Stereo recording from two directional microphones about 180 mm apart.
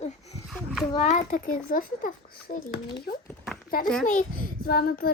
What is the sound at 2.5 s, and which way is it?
A child's voice, 60° left (ahead or behind).